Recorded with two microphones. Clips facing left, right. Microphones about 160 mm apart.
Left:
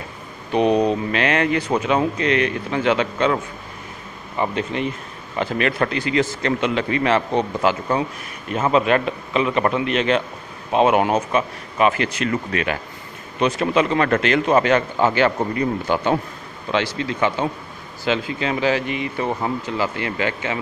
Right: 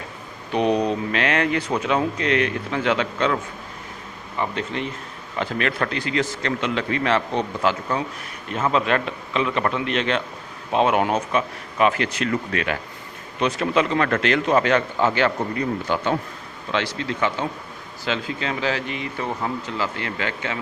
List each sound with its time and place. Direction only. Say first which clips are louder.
0.5 s a man's voice: left 3 dB; 5° left (ahead or behind)
4.4 s a man's voice: left 4 dB; 15° left (ahead or behind)
8.8 s a man's voice: left 4 dB; 10° left (ahead or behind)